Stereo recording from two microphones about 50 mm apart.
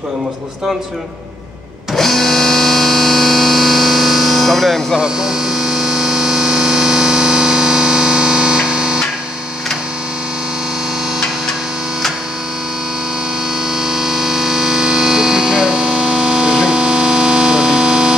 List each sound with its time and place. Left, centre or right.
2.0 s music: centre
5.0 s a sound: centre
13.7 s music: centre